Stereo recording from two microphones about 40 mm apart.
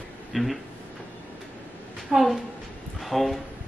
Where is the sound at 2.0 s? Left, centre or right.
Centre.